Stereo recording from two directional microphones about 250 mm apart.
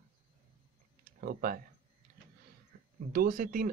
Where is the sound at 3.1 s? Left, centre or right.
Right.